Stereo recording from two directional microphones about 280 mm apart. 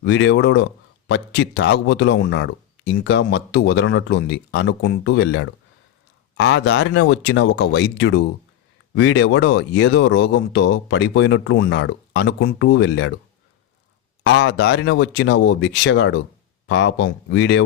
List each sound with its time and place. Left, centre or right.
0.0 s speech: left
14.3 s speech: left